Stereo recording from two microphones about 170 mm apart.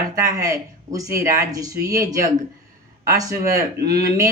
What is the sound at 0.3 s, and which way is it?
Speech, 20° right (ahead or behind).